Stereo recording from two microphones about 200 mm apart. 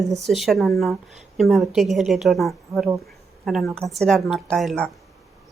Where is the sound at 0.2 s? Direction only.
Centre (ahead or behind).